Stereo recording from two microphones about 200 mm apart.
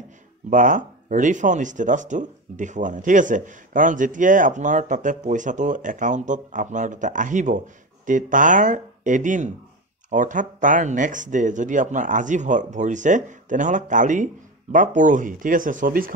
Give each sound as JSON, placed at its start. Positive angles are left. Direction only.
{"t": 0.5, "sound": "speech", "side_deg": -40}